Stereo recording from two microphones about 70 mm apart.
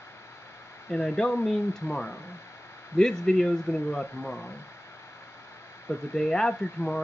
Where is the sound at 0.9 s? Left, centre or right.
Centre.